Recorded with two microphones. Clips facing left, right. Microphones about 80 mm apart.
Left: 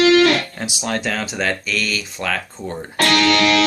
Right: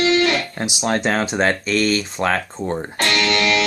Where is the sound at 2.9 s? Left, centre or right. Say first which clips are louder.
Left 6 dB; left.